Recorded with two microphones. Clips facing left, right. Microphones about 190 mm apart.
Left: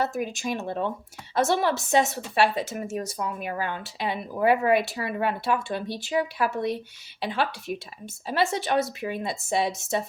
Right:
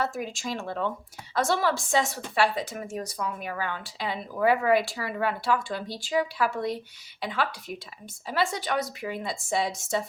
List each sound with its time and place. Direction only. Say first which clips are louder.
0.0 s speech: left 3 dB; 20° left (ahead or behind)